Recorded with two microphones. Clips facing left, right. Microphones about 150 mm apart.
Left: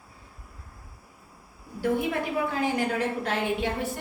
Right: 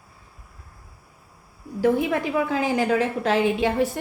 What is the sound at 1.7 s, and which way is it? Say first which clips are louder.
A woman's voice: right 5 dB; 90° right.